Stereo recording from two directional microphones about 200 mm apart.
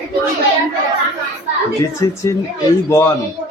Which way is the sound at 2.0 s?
20° left (ahead or behind).